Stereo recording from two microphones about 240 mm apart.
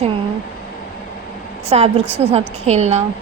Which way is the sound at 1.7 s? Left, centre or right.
Right.